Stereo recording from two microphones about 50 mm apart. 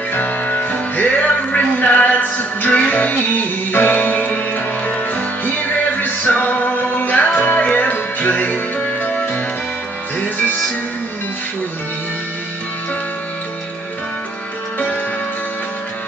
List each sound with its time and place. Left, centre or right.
0.1 s music: left